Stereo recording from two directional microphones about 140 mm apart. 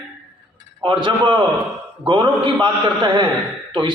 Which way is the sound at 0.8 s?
35° right (ahead or behind).